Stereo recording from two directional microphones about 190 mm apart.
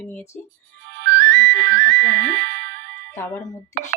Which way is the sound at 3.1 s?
15° left (ahead or behind).